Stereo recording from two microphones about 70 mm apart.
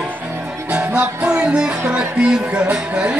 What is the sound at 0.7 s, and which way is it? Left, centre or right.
Music, centre.